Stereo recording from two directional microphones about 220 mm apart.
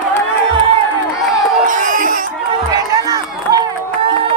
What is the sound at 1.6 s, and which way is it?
Crowd, 35° right (ahead or behind).